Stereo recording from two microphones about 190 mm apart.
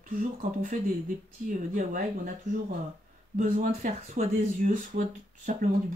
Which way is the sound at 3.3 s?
40° right (ahead or behind).